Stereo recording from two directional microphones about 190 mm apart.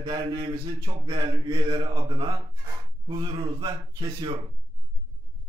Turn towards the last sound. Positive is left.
turn(degrees=-30)  # may be behind; listen again after turning